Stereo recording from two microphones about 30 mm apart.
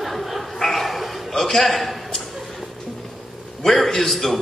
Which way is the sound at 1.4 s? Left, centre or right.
Centre.